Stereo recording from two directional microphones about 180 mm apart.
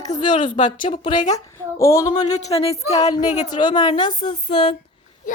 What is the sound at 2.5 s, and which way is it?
Speech, 35° left (ahead or behind).